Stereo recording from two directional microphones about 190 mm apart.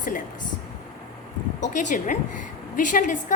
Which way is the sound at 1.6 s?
40° left (ahead or behind).